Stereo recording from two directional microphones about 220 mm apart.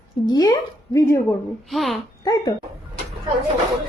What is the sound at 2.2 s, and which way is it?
Speech, 15° left (ahead or behind).